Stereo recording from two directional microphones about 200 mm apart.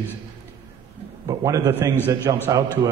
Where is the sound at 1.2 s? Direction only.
15° right (ahead or behind).